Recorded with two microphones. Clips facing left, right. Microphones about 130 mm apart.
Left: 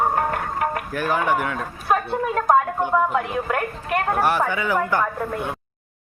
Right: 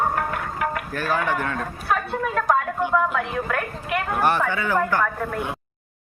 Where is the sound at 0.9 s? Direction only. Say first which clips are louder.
Left 3 dB; 15° left (ahead or behind).